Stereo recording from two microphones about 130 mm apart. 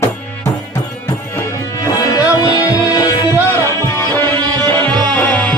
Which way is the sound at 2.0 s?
30° left (ahead or behind).